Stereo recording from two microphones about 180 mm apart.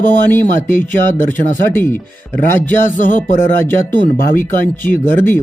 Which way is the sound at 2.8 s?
45° left (ahead or behind).